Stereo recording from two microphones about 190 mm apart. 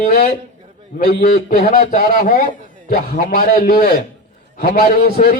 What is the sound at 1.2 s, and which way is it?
A man's voice, 45° left (ahead or behind).